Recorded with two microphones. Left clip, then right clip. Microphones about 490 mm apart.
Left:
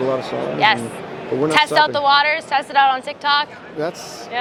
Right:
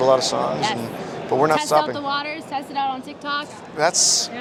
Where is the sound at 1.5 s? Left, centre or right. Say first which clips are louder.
Left 4 dB; left.